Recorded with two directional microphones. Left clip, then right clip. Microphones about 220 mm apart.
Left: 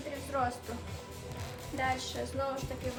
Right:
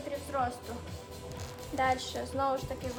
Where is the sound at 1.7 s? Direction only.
20° right (ahead or behind).